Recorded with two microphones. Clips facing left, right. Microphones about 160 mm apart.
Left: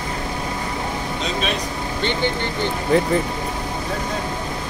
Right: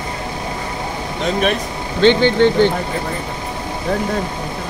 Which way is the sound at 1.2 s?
60° right (ahead or behind).